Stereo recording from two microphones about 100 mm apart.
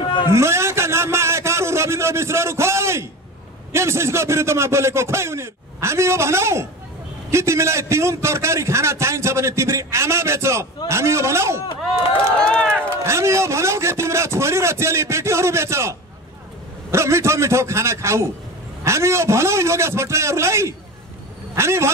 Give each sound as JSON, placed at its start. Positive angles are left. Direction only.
{"t": 0.0, "sound": "a sound", "side_deg": 55}
{"t": 0.3, "sound": "a man's voice", "side_deg": -25}
{"t": 12.4, "sound": "speech", "side_deg": 10}
{"t": 13.0, "sound": "a man's voice", "side_deg": -30}